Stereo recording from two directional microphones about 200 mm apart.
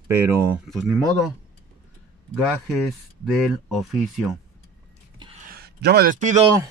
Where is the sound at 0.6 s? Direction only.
Centre (ahead or behind).